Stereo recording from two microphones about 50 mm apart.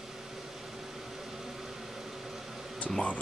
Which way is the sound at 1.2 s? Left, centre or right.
Centre.